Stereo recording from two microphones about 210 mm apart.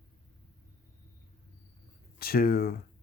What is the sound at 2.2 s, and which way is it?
Speech, 45° left (ahead or behind).